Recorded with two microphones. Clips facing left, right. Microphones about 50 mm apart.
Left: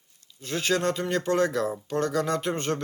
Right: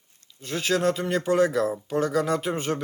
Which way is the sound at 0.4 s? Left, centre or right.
Centre.